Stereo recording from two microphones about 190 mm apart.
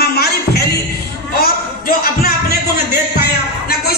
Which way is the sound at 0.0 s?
55° left (ahead or behind).